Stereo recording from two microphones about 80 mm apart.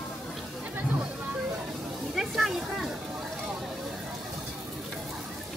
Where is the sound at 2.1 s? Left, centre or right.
Centre.